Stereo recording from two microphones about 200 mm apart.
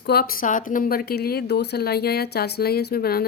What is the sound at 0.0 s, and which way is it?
Speech, 50° left (ahead or behind).